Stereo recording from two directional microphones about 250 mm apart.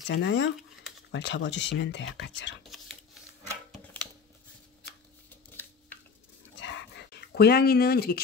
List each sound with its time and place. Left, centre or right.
0.0 s speech: left
2.7 s a sound: centre
6.6 s dog: left